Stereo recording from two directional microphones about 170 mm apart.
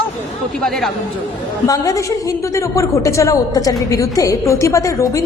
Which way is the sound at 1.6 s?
20° left (ahead or behind).